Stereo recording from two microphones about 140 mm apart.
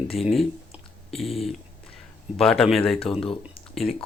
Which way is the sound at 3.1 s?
40° left (ahead or behind).